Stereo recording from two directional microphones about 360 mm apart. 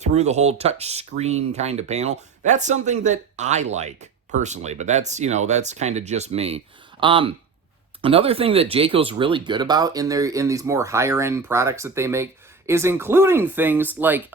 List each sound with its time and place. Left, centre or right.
0.0 s speech: centre